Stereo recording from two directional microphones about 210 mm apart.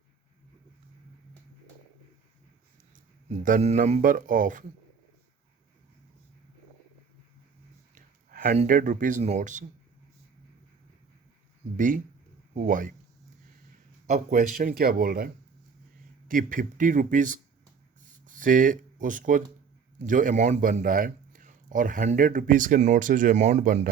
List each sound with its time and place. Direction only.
2.9 s speech: 40° right (ahead or behind)
7.9 s a sound: 40° right (ahead or behind)
8.5 s speech: 40° right (ahead or behind)
11.8 s speech: 40° right (ahead or behind)
14.1 s speech: 40° right (ahead or behind)
16.3 s speech: 40° right (ahead or behind)